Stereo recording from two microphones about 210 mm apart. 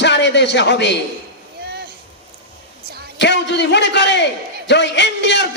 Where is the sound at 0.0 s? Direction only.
55° left (ahead or behind).